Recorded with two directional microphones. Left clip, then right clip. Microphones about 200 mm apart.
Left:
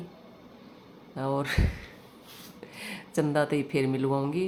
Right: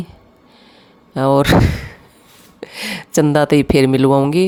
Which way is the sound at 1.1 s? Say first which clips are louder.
Right 17 dB; 55° right (ahead or behind).